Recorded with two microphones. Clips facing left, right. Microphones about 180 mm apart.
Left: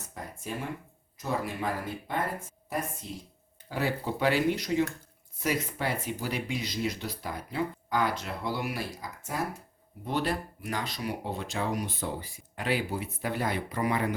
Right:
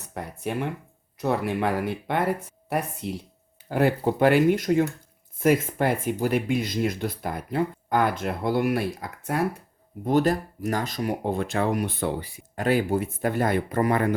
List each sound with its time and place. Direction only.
0.1 s speech: 65° right (ahead or behind)
3.7 s speech: 55° right (ahead or behind)
10.0 s speech: 45° right (ahead or behind); by 12.3 s 65° right (ahead or behind)
12.5 s speech: 45° right (ahead or behind)